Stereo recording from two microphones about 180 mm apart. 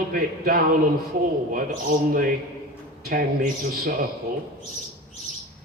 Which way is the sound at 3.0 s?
55° right (ahead or behind).